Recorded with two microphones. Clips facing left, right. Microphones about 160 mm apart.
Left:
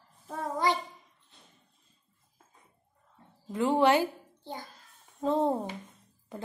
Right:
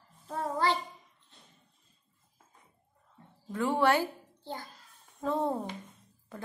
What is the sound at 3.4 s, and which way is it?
A woman's voice, 20° left (ahead or behind).